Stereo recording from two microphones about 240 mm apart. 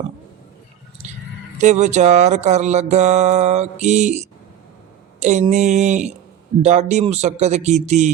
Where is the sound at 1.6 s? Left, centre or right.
Right.